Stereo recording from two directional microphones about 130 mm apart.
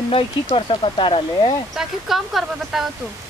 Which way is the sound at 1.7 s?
Centre (ahead or behind).